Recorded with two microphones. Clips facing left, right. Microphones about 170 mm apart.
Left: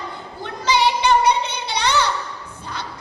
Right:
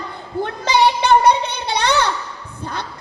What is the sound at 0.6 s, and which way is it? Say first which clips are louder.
Child singing: right 1 dB; 55° right (ahead or behind).